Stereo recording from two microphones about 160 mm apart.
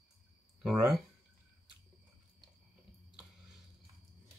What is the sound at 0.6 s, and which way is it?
Speech, centre (ahead or behind).